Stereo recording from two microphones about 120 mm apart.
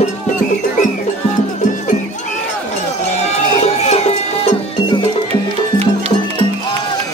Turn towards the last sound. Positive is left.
turn(degrees=-55)  # may be behind; listen again after turning